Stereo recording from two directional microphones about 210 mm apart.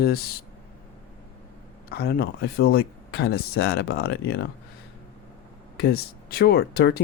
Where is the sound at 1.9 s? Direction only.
50° left (ahead or behind).